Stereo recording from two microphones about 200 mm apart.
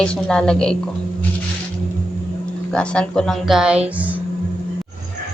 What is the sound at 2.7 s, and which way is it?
Speech, 5° left (ahead or behind).